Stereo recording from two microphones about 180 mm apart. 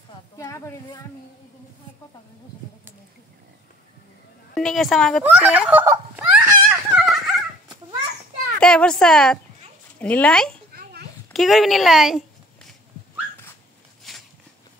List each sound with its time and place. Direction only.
0.4 s a woman's voice: 15° left (ahead or behind)
4.6 s a woman's voice: centre (ahead or behind)
5.2 s giggle: 5° right (ahead or behind)
7.0 s turkey: centre (ahead or behind)
8.5 s a woman's voice: 5° left (ahead or behind)
10.7 s a sound: 60° right (ahead or behind)
11.3 s a woman's voice: centre (ahead or behind)
14.1 s a sound: centre (ahead or behind)